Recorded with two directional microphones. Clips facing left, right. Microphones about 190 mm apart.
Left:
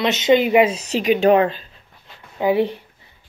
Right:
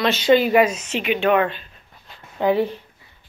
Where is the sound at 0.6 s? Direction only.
35° left (ahead or behind).